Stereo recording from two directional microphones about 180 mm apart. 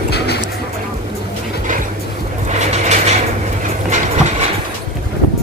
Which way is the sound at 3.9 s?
40° right (ahead or behind).